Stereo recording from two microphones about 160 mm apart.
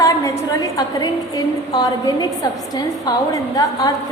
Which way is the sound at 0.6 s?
20° left (ahead or behind).